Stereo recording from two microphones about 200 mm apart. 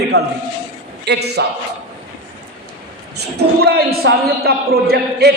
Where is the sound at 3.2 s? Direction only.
55° right (ahead or behind).